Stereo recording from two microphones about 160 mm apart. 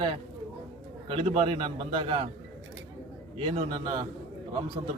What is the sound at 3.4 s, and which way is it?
Speech, 30° right (ahead or behind).